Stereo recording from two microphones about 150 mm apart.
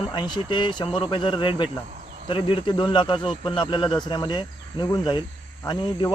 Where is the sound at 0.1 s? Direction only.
30° left (ahead or behind).